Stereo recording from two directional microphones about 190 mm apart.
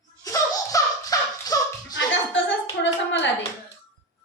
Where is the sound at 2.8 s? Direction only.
70° left (ahead or behind).